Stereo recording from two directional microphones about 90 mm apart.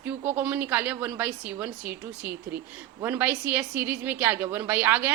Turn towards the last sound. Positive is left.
turn(degrees=-20)  # may be behind; listen again after turning